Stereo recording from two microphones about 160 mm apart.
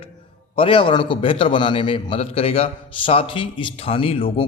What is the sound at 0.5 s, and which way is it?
A man's voice, 35° left (ahead or behind).